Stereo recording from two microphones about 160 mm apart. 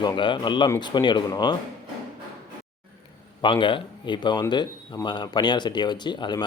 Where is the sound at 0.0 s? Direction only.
30° left (ahead or behind).